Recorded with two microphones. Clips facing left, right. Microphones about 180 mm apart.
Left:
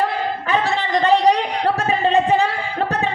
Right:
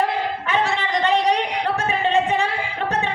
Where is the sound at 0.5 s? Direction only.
35° left (ahead or behind).